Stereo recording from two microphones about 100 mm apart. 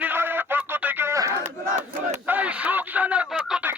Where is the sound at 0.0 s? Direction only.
20° right (ahead or behind).